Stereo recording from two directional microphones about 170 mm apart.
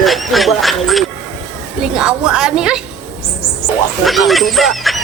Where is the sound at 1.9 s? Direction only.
5° right (ahead or behind).